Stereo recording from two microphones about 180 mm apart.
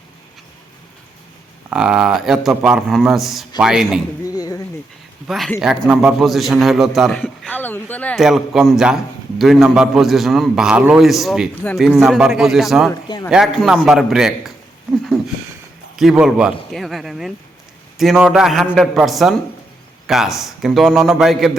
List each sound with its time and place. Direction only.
1.7 s a man's voice: 5° right (ahead or behind)
4.3 s a sound: 20° left (ahead or behind)
5.3 s a man's voice: centre (ahead or behind)
12.9 s a man's voice: 25° left (ahead or behind)
13.3 s a man's voice: centre (ahead or behind)
16.0 s a man's voice: centre (ahead or behind)